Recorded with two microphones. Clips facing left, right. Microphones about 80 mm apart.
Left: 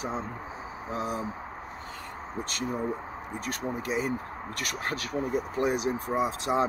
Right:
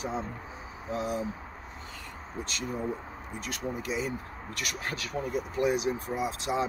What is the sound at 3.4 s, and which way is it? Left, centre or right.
Speech, left.